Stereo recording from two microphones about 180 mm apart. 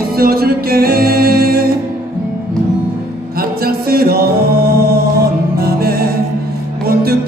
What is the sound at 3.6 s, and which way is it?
Music, 55° right (ahead or behind).